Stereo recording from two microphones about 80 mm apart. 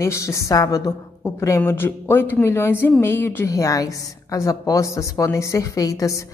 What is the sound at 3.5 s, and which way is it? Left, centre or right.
A woman's voice, left.